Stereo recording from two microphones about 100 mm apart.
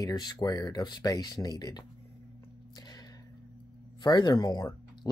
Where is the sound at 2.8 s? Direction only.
45° left (ahead or behind).